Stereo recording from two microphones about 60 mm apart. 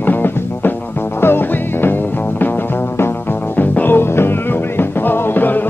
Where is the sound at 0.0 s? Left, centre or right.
Left.